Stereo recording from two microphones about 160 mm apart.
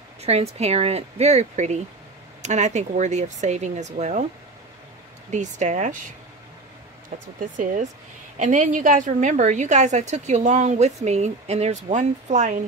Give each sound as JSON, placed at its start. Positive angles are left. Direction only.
{"t": 0.2, "sound": "a woman's voice", "side_deg": -40}
{"t": 5.3, "sound": "a woman's voice", "side_deg": -50}
{"t": 7.3, "sound": "a woman's voice", "side_deg": -55}